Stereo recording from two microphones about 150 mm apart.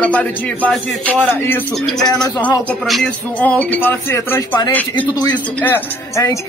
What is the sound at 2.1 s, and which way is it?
Speech, 25° left (ahead or behind).